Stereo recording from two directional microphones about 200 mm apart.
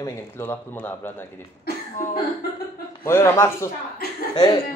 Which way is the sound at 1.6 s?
45° left (ahead or behind).